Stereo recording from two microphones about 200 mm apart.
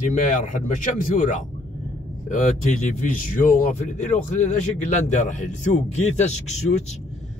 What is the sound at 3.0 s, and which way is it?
Speech, 40° left (ahead or behind).